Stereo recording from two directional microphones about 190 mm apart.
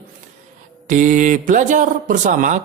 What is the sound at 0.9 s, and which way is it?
Speech, 40° right (ahead or behind).